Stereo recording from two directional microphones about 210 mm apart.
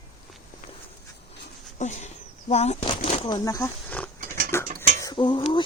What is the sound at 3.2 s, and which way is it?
Speech, 20° left (ahead or behind).